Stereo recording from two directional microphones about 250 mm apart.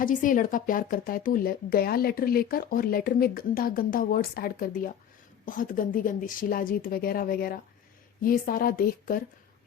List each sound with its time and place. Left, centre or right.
0.0 s a woman's voice: left